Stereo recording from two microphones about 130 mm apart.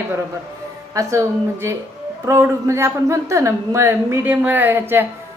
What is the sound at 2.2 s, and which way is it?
A woman's voice, 20° right (ahead or behind).